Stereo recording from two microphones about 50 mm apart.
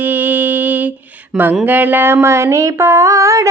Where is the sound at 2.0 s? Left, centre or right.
Right.